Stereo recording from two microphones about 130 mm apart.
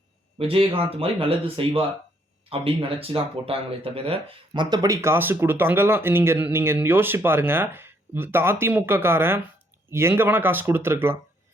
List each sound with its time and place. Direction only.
0.3 s speech: 45° right (ahead or behind); by 11.2 s 20° right (ahead or behind)